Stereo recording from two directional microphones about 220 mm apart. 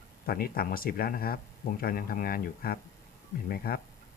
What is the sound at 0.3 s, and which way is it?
Speech, 40° left (ahead or behind).